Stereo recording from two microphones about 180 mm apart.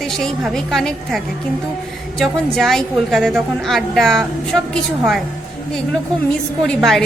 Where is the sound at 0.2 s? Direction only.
Centre (ahead or behind).